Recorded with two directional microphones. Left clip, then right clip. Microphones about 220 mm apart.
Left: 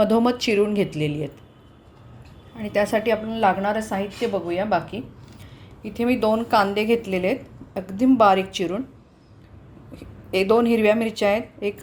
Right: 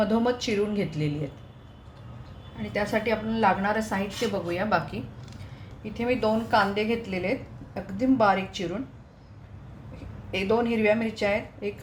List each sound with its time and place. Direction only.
0.0 s a woman's voice: 35° left (ahead or behind)
2.6 s a woman's voice: 40° left (ahead or behind); by 4.9 s 20° left (ahead or behind)
5.8 s a woman's voice: 40° left (ahead or behind)
10.3 s a woman's voice: 45° left (ahead or behind)